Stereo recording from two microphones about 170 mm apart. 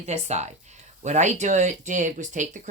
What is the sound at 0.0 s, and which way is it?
Speech, 40° right (ahead or behind).